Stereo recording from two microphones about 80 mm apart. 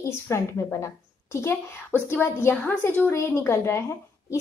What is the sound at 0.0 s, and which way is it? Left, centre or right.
A woman's voice, left.